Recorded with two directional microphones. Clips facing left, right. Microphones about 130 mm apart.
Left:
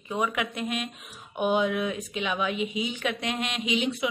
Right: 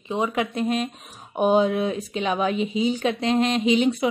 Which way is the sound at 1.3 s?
35° right (ahead or behind).